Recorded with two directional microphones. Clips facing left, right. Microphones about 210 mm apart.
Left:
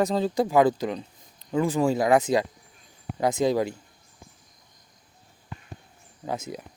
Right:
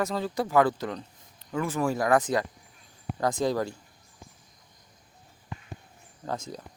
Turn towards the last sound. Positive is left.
turn(degrees=10)  # may be behind; listen again after turning